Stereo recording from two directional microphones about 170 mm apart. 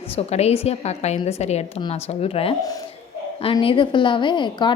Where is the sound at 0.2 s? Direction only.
40° left (ahead or behind).